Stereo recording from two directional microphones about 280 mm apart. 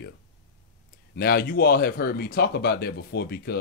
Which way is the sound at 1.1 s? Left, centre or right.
Left.